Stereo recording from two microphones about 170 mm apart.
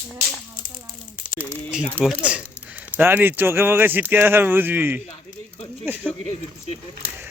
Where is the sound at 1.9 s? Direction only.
5° right (ahead or behind).